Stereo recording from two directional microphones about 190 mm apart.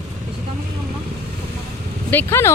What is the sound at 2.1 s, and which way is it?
Speech, 10° left (ahead or behind).